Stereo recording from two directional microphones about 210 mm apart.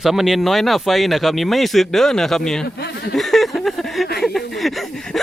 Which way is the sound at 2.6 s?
50° left (ahead or behind).